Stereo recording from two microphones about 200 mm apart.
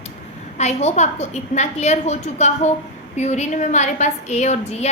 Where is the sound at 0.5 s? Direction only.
35° left (ahead or behind).